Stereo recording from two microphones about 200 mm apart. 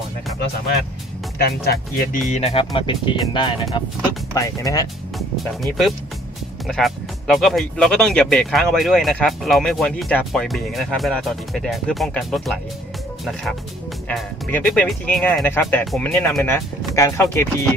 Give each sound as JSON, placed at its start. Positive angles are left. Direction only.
{"t": 2.0, "sound": "speech", "side_deg": 35}
{"t": 5.4, "sound": "speech", "side_deg": 0}